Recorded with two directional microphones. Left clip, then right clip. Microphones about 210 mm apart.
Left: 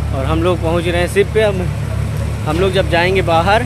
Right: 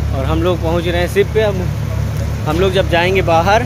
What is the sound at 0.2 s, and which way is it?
Speech, 10° left (ahead or behind).